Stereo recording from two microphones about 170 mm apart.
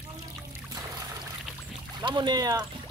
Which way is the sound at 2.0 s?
25° right (ahead or behind).